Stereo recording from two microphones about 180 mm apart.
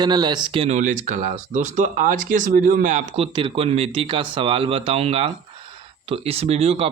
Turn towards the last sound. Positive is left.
turn(degrees=-35)  # may be behind; listen again after turning